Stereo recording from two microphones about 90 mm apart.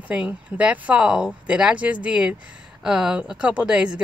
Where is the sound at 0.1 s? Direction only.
15° right (ahead or behind).